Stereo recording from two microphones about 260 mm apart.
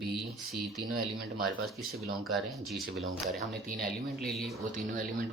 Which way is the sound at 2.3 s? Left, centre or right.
Centre.